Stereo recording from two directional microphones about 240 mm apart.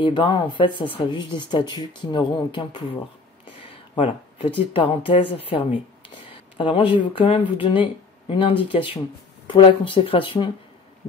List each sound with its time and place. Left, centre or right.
0.0 s speech: centre
4.0 s speech: left